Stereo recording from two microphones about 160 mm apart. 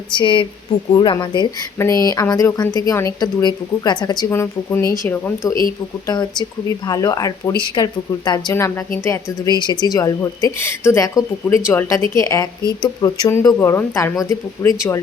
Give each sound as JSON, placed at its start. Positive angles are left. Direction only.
{"t": 0.1, "sound": "a woman's voice", "side_deg": 30}
{"t": 6.8, "sound": "speech", "side_deg": 20}